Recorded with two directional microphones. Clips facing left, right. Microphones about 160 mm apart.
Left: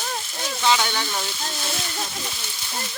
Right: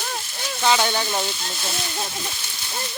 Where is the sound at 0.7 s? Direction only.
35° right (ahead or behind).